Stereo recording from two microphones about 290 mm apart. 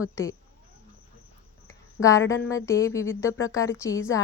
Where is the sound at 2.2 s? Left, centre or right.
Left.